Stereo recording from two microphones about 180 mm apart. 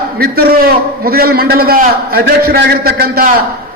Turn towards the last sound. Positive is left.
turn(degrees=-60)  # may be behind; listen again after turning